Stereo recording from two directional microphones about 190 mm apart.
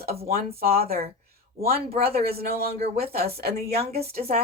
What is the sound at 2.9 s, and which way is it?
Speech, 55° right (ahead or behind).